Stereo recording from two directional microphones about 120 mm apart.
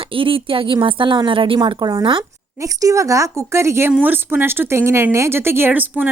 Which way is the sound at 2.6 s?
25° right (ahead or behind).